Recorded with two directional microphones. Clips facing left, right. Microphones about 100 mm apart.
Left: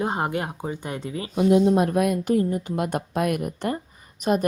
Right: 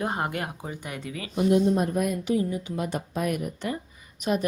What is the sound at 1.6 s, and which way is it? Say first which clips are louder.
Speech: left 4 dB; 75° left (ahead or behind).